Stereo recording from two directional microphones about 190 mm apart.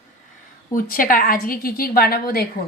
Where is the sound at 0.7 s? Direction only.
50° left (ahead or behind).